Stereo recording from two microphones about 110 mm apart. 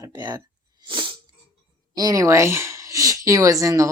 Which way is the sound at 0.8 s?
45° right (ahead or behind).